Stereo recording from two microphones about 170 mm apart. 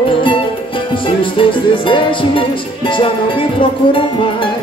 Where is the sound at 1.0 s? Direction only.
30° left (ahead or behind).